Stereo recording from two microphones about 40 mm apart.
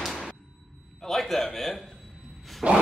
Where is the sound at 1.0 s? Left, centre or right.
Centre.